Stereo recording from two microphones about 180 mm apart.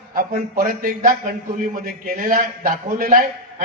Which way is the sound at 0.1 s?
50° right (ahead or behind).